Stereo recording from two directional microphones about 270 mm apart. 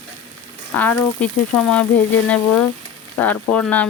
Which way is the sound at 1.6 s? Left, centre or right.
Centre.